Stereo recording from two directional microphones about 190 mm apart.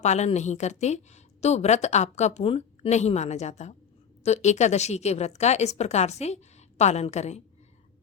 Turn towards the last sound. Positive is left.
turn(degrees=35)  # may be behind; listen again after turning